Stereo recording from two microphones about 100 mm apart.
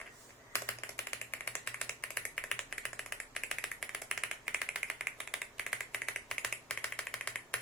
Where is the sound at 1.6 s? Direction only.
10° left (ahead or behind).